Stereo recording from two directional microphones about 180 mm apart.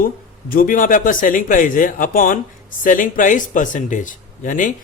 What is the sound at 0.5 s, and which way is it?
Speech, 50° left (ahead or behind).